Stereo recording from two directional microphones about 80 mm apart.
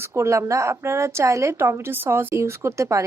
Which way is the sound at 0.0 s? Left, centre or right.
Right.